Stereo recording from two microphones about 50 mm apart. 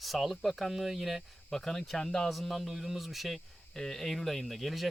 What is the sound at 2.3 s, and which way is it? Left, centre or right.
Speech, centre.